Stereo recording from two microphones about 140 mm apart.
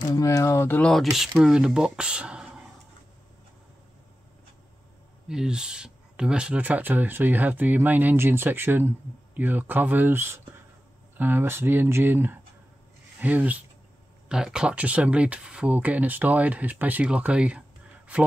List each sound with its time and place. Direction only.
0.1 s speech: 25° left (ahead or behind); by 2.6 s 5° right (ahead or behind)
5.3 s speech: 5° right (ahead or behind)